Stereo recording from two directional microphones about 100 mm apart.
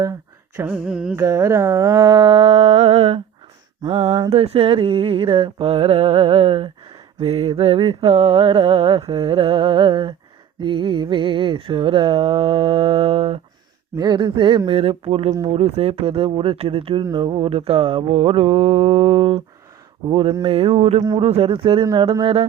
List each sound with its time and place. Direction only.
0.6 s a sound: 10° right (ahead or behind)
1.1 s speech: 30° right (ahead or behind)
2.0 s humming: 50° right (ahead or behind); by 3.2 s 90° right
4.3 s mantra: 80° right; by 10.2 s 60° right (ahead or behind)
10.6 s a sound: 60° right (ahead or behind)
14.0 s a sound: 50° right (ahead or behind)
14.7 s humming: 75° right (ahead or behind)
15.4 s mantra: 90° right; by 17.0 s 65° right (ahead or behind)
17.0 s mantra: 45° right (ahead or behind); by 19.4 s 75° right (ahead or behind)
20.1 s a sound: 60° right (ahead or behind)
20.5 s humming: 80° right
21.2 s mantra: 85° right; by 21.8 s 65° right (ahead or behind)